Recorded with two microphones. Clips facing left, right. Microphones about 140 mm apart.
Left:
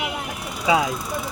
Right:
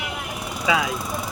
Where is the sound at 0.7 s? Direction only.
30° left (ahead or behind).